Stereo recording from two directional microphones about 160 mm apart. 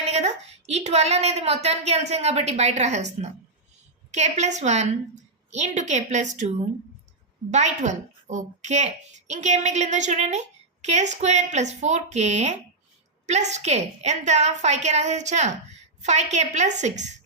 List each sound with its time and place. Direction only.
0.1 s a woman's voice: 45° right (ahead or behind)
4.1 s a woman's voice: 45° right (ahead or behind)
7.5 s a woman's voice: 45° right (ahead or behind)